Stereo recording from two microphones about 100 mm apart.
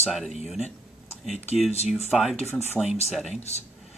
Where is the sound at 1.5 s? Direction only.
90° left.